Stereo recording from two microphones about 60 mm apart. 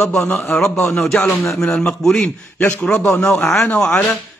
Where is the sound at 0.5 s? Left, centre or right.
Centre.